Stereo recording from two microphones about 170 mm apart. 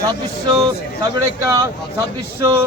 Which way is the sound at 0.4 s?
25° right (ahead or behind).